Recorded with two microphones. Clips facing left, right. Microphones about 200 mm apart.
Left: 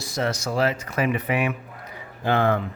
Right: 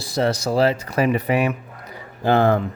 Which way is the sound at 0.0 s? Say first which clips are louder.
Right 5 dB; 35° right (ahead or behind).